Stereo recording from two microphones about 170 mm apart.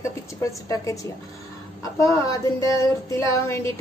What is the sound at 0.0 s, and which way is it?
A woman's voice, 20° left (ahead or behind).